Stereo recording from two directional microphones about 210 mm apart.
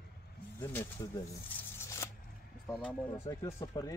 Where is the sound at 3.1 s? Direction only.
15° left (ahead or behind).